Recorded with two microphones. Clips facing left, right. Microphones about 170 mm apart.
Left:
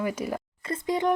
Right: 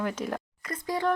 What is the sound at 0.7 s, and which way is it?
Speech, 20° left (ahead or behind).